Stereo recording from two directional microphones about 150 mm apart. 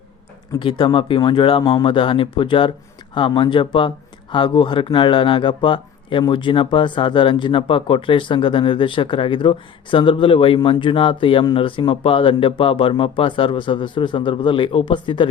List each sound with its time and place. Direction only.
0.6 s speech: 30° left (ahead or behind)